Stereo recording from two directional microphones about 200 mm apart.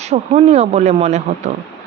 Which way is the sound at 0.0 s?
35° right (ahead or behind).